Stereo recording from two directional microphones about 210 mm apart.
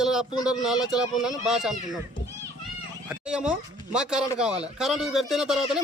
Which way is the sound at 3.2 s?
5° right (ahead or behind).